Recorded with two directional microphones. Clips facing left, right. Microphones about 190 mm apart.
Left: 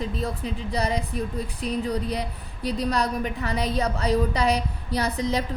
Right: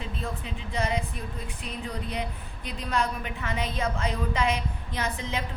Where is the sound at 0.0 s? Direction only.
40° left (ahead or behind).